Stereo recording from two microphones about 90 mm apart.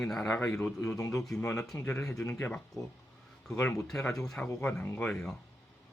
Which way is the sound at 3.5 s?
30° left (ahead or behind).